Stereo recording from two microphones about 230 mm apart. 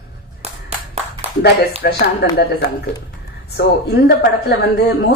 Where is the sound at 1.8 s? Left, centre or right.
Left.